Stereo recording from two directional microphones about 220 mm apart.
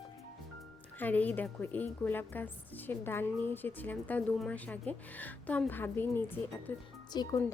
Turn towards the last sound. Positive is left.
turn(degrees=15)  # may be behind; listen again after turning